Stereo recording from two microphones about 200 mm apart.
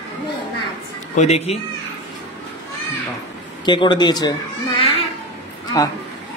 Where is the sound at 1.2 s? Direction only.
30° left (ahead or behind).